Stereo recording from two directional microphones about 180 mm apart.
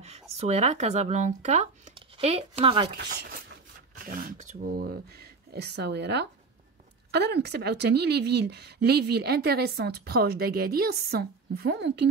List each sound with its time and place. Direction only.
0.0 s speech: 35° right (ahead or behind)
3.0 s speech: 65° right (ahead or behind)
4.0 s speech: 50° right (ahead or behind)
5.5 s a woman's voice: 65° right (ahead or behind)